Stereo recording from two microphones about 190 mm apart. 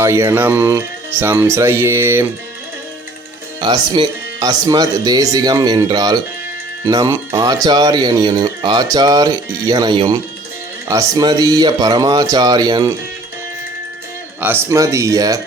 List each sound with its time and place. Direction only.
0.0 s speech: 15° right (ahead or behind)
3.6 s speech: 25° right (ahead or behind)
14.4 s speech: 15° right (ahead or behind)